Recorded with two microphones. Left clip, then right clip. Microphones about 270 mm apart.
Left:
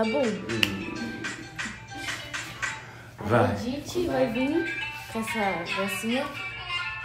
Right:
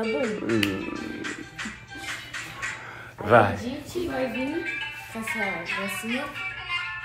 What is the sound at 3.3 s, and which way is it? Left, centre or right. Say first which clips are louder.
Music: right 5 dB; centre.